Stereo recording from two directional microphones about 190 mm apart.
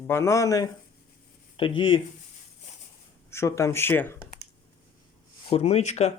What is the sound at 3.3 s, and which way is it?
Speech, 15° left (ahead or behind).